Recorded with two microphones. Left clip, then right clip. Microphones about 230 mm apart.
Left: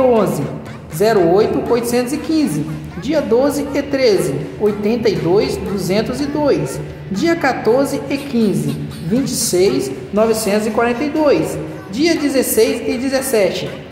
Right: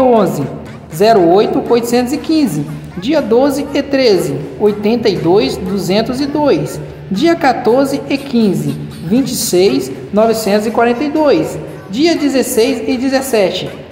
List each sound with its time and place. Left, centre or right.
0.1 s music: centre
0.9 s a woman's voice: centre